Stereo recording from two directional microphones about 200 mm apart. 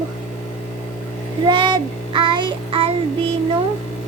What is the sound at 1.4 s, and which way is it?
Child singing, 25° right (ahead or behind).